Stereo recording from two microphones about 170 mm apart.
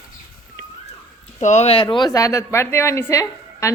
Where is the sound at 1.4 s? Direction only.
40° left (ahead or behind).